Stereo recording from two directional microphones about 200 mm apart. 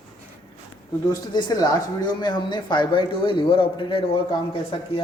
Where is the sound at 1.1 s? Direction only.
20° left (ahead or behind).